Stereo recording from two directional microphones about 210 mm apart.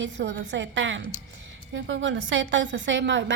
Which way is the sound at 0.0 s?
60° right (ahead or behind).